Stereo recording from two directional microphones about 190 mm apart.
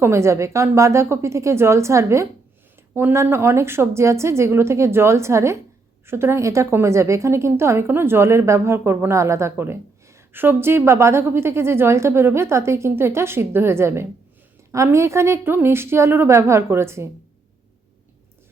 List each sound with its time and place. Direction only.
0.0 s a woman's voice: 15° right (ahead or behind)